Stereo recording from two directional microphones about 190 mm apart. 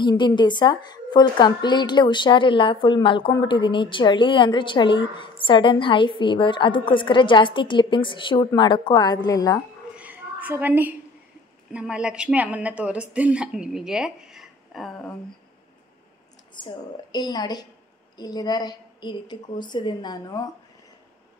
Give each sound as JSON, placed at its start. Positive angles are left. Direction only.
{"t": 0.0, "sound": "a woman's voice", "side_deg": 25}
{"t": 9.9, "sound": "a sound", "side_deg": -10}
{"t": 11.7, "sound": "a woman's voice", "side_deg": -5}
{"t": 16.6, "sound": "a woman's voice", "side_deg": 20}